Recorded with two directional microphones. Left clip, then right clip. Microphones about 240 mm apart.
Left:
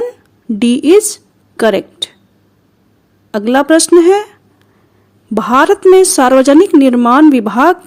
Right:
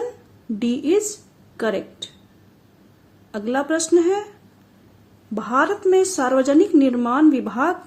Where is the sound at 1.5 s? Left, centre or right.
Left.